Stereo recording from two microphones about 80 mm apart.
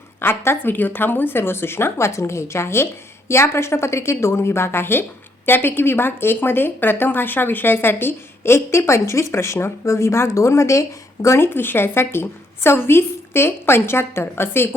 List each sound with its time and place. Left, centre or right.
0.2 s a woman's voice: left